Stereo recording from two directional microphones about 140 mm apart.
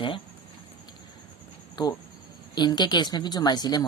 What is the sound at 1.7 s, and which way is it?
Speech, 30° left (ahead or behind).